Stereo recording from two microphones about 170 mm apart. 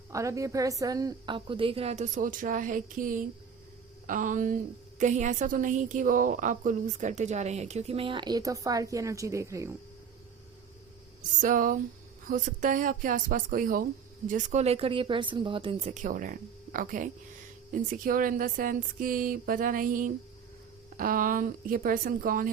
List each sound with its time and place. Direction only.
0.1 s a woman's voice: 20° right (ahead or behind)
11.2 s a woman's voice: 50° right (ahead or behind)